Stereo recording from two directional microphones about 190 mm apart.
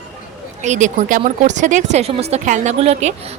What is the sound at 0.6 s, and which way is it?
Speech, 40° right (ahead or behind).